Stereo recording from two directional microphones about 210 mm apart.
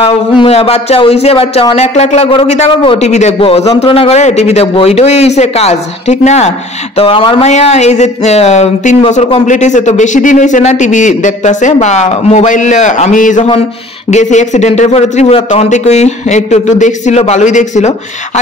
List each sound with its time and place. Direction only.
0.0 s a man's voice: 30° left (ahead or behind)